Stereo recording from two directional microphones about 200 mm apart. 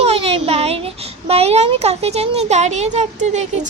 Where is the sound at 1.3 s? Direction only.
30° right (ahead or behind).